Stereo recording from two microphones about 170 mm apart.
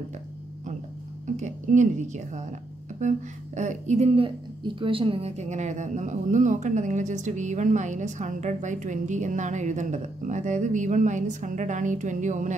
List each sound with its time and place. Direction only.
1.2 s a woman's voice: 45° right (ahead or behind)